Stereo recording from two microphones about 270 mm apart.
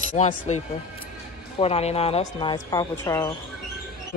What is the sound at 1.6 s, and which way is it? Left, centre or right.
A woman's voice, left.